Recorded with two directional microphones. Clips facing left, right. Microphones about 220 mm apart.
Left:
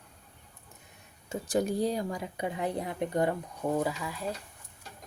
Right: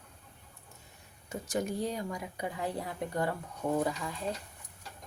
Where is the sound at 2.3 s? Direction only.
20° left (ahead or behind).